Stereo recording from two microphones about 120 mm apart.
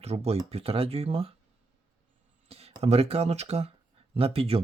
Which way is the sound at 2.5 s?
55° right (ahead or behind).